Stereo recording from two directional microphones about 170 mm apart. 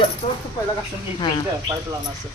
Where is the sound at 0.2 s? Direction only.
35° left (ahead or behind).